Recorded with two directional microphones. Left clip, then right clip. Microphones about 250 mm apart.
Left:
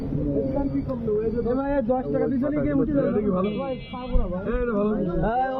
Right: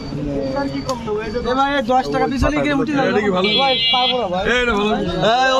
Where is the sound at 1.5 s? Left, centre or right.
Right.